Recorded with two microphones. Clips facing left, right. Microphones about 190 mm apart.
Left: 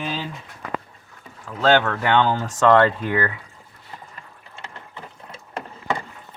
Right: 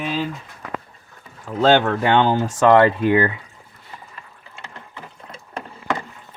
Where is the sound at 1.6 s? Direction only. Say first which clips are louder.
Right 3 dB; 20° right (ahead or behind).